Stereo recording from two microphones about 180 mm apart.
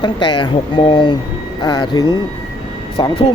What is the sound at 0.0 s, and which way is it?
Speech, 25° left (ahead or behind).